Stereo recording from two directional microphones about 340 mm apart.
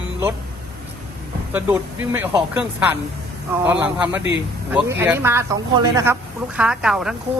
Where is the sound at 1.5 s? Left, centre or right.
Centre.